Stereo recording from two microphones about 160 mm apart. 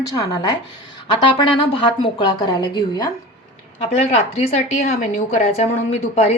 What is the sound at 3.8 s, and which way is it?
A woman's voice, 40° left (ahead or behind).